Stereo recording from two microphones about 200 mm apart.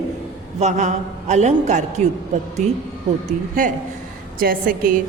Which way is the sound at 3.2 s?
40° right (ahead or behind).